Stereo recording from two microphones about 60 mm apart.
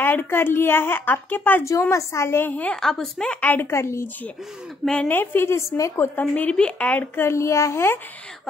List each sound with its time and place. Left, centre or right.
0.0 s speech: left
1.6 s a woman's voice: left
2.7 s a woman's voice: centre
3.3 s a woman's voice: left
3.7 s a woman's voice: left
4.9 s a woman's voice: left
5.9 s a woman's voice: left
6.5 s speech: centre
6.9 s speech: left
7.2 s a woman's voice: left